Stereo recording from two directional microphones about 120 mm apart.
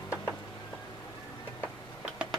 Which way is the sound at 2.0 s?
5° right (ahead or behind).